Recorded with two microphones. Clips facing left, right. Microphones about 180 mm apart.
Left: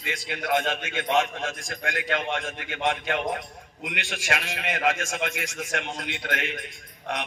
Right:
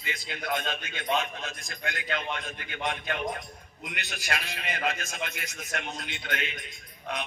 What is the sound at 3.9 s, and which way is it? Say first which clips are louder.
A man's voice: left 5 dB; 90° left.